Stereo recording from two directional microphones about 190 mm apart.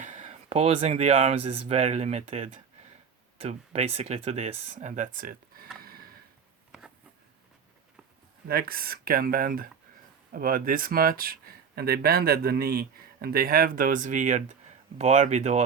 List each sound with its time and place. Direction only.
0.0 s speech: 40° right (ahead or behind)
6.7 s a sound: 5° right (ahead or behind)
8.4 s speech: 50° right (ahead or behind)